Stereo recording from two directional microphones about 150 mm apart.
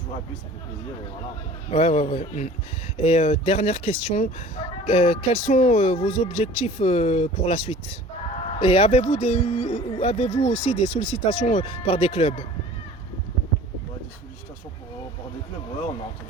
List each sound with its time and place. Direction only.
1.7 s speech: 45° left (ahead or behind)